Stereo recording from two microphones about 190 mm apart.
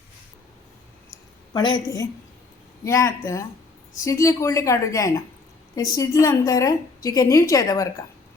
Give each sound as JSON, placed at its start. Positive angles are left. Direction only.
{"t": 1.5, "sound": "a woman's voice", "side_deg": 20}